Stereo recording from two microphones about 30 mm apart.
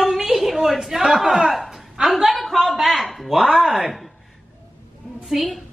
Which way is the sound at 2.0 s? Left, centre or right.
Centre.